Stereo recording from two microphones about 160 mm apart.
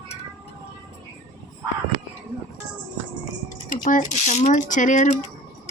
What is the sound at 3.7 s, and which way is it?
Speech, 55° left (ahead or behind).